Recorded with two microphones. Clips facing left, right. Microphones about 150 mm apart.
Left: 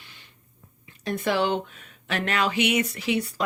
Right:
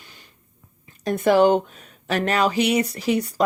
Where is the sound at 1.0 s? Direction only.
45° right (ahead or behind).